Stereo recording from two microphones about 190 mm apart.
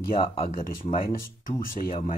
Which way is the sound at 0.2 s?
35° left (ahead or behind).